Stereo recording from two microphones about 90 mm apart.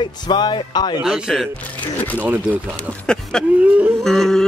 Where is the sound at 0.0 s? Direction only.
60° left (ahead or behind).